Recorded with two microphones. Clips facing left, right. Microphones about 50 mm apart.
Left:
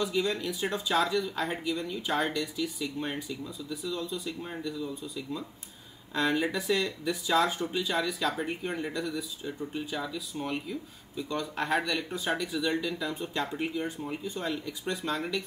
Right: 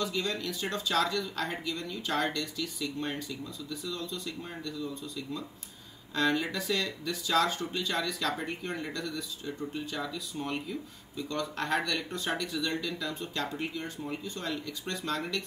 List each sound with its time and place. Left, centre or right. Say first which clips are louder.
0.0 s speech: left 3 dB; centre